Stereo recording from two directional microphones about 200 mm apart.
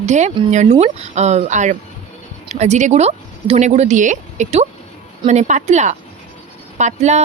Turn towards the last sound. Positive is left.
turn(degrees=-35)  # may be behind; listen again after turning